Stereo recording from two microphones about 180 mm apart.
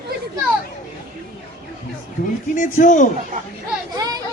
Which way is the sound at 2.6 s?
45° left (ahead or behind).